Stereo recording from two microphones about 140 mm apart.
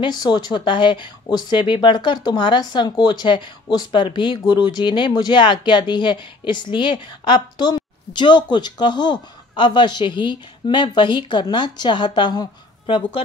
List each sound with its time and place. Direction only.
0.0 s speech: 30° left (ahead or behind)